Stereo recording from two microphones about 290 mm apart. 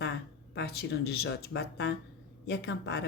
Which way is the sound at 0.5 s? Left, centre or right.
Left.